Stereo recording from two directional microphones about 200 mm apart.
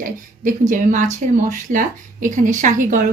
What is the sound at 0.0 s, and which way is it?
Speech, 40° right (ahead or behind).